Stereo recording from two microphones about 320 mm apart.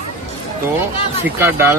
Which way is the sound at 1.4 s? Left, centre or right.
Centre.